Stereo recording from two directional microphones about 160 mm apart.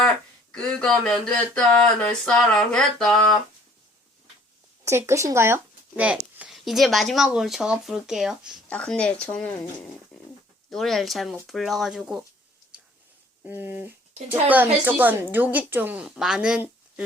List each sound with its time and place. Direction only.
0.5 s speech: 5° left (ahead or behind)
4.9 s a woman's voice: 15° right (ahead or behind)
13.4 s a woman's voice: 10° right (ahead or behind)